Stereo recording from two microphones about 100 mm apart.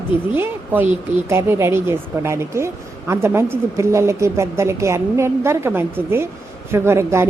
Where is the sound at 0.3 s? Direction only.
20° right (ahead or behind).